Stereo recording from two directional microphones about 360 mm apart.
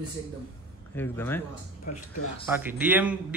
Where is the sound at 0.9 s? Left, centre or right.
Centre.